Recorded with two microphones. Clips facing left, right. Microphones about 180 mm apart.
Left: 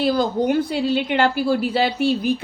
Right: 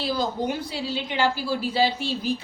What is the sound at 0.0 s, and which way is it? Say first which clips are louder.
A woman's voice: left 7 dB; 60° left (ahead or behind).